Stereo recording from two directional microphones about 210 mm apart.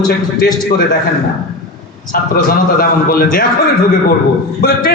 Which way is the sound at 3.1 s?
45° left (ahead or behind).